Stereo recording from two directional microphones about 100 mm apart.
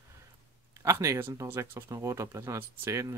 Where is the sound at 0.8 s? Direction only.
30° right (ahead or behind).